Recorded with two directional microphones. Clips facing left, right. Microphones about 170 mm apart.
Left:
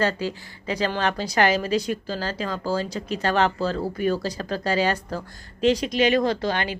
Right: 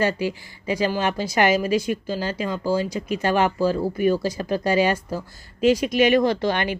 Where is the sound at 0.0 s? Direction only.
10° right (ahead or behind).